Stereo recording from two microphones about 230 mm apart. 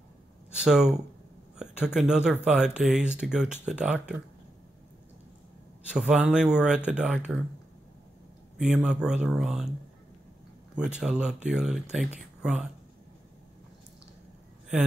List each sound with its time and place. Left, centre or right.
0.7 s speech: centre
1.6 s a sound: centre
2.0 s speech: centre
5.9 s speech: centre
8.5 s speech: centre
11.0 s speech: centre